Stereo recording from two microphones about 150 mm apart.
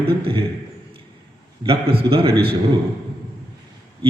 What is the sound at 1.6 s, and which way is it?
Speech, 40° right (ahead or behind).